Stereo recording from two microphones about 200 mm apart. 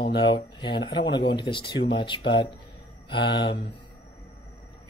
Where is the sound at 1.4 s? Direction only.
25° left (ahead or behind).